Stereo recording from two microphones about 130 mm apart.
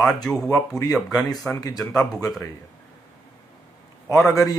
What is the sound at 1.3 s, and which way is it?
Speech, 25° left (ahead or behind).